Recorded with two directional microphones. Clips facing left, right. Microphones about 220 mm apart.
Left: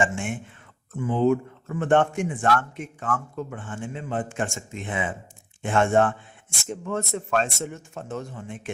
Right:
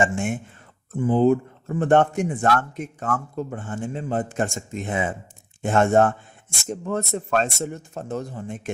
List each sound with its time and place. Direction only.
0.0 s speech: 40° right (ahead or behind)